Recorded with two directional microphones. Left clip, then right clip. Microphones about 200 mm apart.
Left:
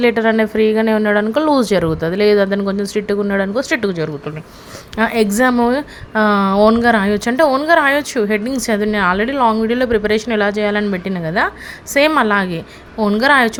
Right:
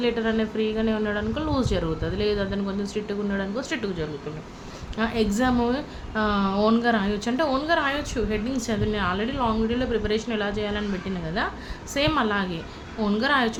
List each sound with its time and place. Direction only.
0.0 s a woman's voice: 45° left (ahead or behind)